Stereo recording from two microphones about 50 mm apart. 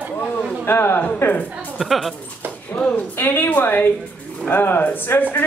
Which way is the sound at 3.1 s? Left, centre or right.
Left.